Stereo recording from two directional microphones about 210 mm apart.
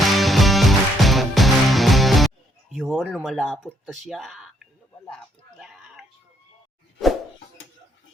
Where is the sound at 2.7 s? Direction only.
Centre (ahead or behind).